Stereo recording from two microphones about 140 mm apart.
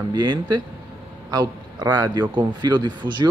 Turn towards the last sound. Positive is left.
turn(degrees=-30)  # may be behind; listen again after turning